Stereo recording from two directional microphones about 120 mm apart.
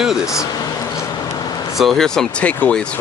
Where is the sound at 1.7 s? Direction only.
Centre (ahead or behind).